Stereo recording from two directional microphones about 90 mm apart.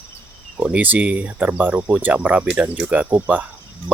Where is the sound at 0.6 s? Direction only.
15° right (ahead or behind).